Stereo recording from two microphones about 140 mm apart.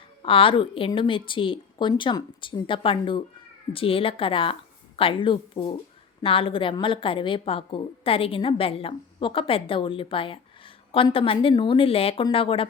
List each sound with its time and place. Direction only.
0.2 s a woman's voice: 40° left (ahead or behind)